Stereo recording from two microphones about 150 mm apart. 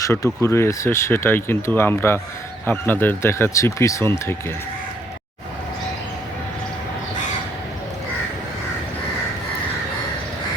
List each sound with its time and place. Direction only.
0.0 s speech: 20° left (ahead or behind)